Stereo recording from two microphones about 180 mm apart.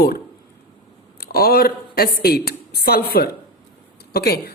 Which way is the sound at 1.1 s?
60° left (ahead or behind).